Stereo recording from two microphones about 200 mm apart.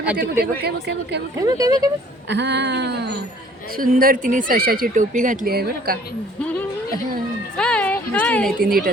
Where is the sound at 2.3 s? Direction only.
60° right (ahead or behind).